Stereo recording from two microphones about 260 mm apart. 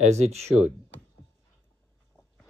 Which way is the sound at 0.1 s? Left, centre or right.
Right.